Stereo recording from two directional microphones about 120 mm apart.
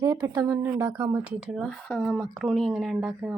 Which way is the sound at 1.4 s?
5° right (ahead or behind).